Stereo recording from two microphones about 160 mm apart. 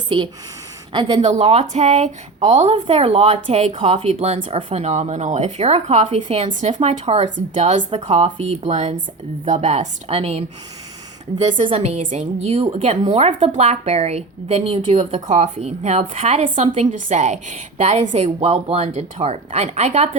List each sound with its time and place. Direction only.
0.1 s a woman's voice: 30° right (ahead or behind)
1.2 s a woman's voice: 40° right (ahead or behind)
2.7 s a woman's voice: 35° right (ahead or behind)